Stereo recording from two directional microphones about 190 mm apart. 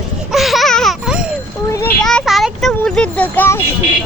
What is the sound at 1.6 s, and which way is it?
Speech, 15° left (ahead or behind).